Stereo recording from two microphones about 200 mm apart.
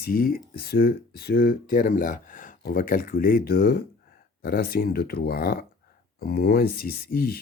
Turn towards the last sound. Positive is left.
turn(degrees=50)  # may be behind; listen again after turning